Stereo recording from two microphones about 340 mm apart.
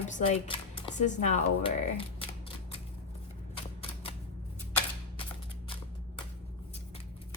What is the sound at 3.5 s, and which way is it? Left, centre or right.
Typewriter, centre.